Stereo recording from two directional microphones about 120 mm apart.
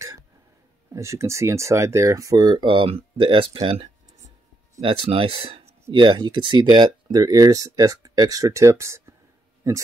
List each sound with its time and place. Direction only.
0.9 s speech: 25° right (ahead or behind)